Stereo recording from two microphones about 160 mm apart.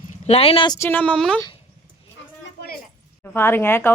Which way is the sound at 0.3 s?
40° left (ahead or behind).